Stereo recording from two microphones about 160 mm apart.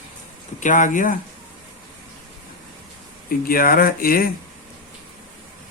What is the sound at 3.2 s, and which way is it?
Speech, 65° left (ahead or behind).